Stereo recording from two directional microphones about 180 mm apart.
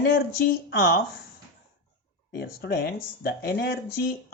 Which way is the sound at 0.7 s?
55° left (ahead or behind).